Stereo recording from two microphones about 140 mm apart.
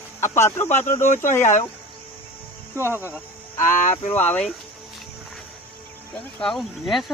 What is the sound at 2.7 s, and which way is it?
Speech, 15° right (ahead or behind).